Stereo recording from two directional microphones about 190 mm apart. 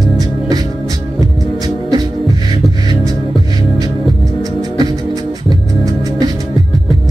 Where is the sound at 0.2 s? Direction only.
20° right (ahead or behind).